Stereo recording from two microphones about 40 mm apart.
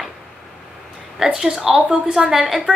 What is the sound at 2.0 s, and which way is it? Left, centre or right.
Speech, right.